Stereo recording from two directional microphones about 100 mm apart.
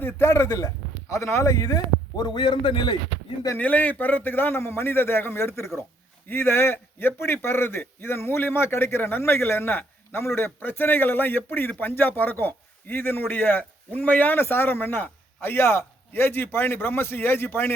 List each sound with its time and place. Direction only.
0.0 s a man's voice: 25° left (ahead or behind); by 3.0 s 50° left (ahead or behind)
3.6 s a man's voice: 15° left (ahead or behind)